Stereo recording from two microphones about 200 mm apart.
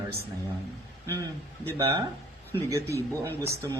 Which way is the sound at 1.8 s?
20° right (ahead or behind).